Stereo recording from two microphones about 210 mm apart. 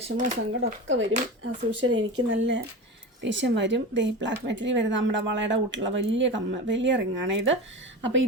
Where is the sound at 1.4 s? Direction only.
70° right (ahead or behind).